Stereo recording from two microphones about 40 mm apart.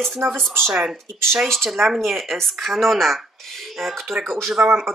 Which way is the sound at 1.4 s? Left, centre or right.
Centre.